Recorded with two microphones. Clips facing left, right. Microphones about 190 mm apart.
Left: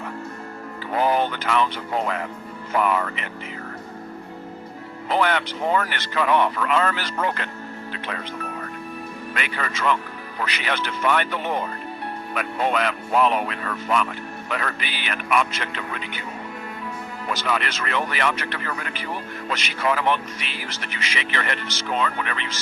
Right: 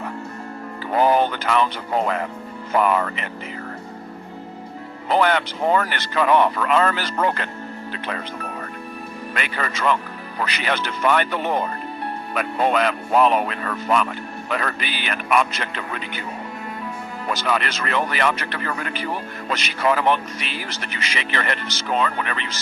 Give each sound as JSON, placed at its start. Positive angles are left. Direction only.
{"t": 0.9, "sound": "speech", "side_deg": -40}
{"t": 5.0, "sound": "speech", "side_deg": -40}
{"t": 9.3, "sound": "speech", "side_deg": -40}
{"t": 17.2, "sound": "speech", "side_deg": -40}